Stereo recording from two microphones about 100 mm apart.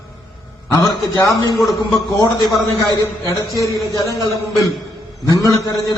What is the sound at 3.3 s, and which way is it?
A man's voice, 35° left (ahead or behind).